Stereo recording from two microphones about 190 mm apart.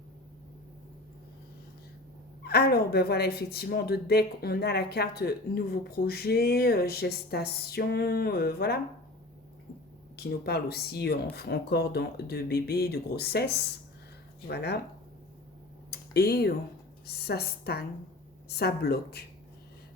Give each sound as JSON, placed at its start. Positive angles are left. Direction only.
{"t": 2.4, "sound": "speech", "side_deg": 55}
{"t": 10.2, "sound": "speech", "side_deg": 55}
{"t": 15.9, "sound": "a sound", "side_deg": 55}
{"t": 17.1, "sound": "speech", "side_deg": 55}